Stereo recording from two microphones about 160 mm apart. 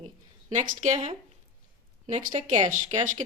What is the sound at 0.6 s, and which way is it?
Speech, 50° right (ahead or behind).